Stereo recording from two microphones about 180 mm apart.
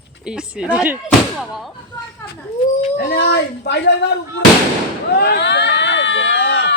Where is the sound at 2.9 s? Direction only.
65° left (ahead or behind).